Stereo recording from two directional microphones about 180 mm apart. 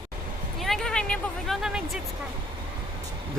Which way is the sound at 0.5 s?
Centre (ahead or behind).